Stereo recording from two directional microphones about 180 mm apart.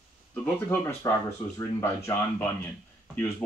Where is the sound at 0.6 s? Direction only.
15° left (ahead or behind).